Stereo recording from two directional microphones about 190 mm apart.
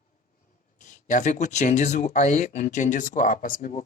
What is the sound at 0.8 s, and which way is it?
Speech, 40° left (ahead or behind).